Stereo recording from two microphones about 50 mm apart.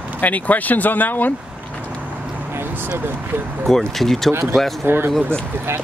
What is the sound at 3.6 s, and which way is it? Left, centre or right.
Speech, centre.